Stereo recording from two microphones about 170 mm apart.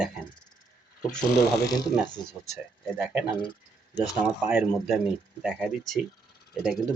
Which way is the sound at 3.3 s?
30° left (ahead or behind).